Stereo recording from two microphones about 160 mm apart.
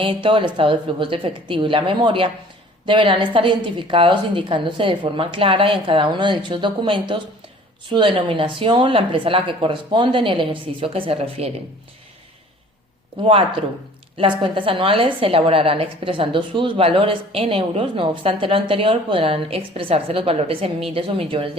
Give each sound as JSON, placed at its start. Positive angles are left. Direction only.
{"t": 0.0, "sound": "a woman's voice", "side_deg": -35}
{"t": 14.2, "sound": "a woman's voice", "side_deg": -30}